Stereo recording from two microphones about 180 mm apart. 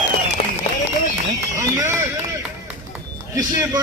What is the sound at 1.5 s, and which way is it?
Run, 15° right (ahead or behind).